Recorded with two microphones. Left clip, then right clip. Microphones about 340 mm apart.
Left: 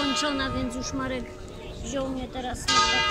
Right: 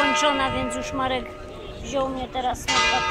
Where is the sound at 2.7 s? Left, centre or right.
Right.